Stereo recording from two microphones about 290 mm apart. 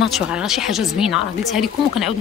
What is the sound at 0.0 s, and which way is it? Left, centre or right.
A woman's voice, centre.